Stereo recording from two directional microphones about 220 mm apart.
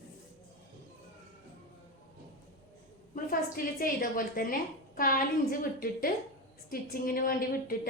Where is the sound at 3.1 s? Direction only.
40° left (ahead or behind).